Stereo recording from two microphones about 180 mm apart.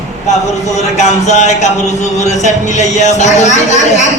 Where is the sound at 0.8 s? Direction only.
40° left (ahead or behind).